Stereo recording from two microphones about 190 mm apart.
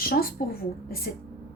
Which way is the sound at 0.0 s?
50° left (ahead or behind).